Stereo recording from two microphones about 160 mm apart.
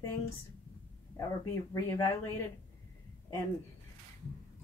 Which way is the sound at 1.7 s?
20° left (ahead or behind).